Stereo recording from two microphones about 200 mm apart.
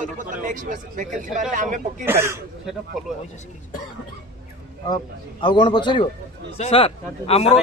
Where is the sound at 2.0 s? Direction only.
10° right (ahead or behind).